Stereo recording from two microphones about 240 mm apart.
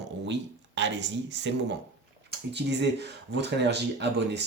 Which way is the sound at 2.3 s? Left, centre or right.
Right.